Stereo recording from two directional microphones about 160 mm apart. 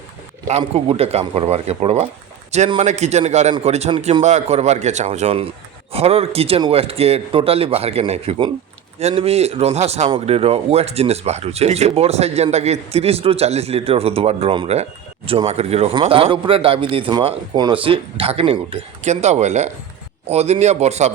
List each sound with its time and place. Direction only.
0.4 s speech: 40° right (ahead or behind)
4.2 s speech: 45° right (ahead or behind)